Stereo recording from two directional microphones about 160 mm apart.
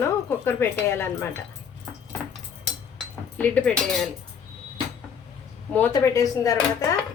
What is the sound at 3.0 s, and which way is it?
Cutlery, 10° left (ahead or behind).